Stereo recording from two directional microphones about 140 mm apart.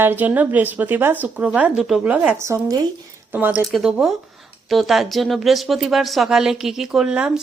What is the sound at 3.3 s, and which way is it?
Speech, 10° right (ahead or behind).